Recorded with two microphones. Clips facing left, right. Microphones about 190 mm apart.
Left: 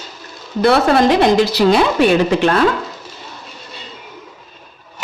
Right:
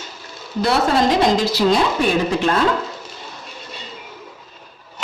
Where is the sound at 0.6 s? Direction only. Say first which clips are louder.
Left 5 dB; 60° left (ahead or behind).